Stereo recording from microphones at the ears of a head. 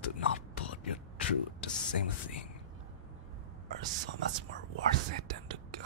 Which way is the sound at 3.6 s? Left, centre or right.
Right.